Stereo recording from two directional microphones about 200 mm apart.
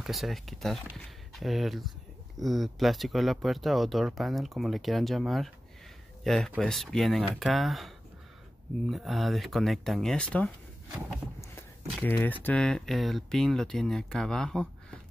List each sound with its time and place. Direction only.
0.0 s speech: centre (ahead or behind)
11.5 s speech: 10° left (ahead or behind)